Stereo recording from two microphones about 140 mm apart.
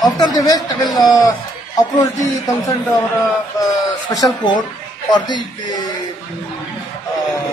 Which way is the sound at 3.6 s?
25° left (ahead or behind).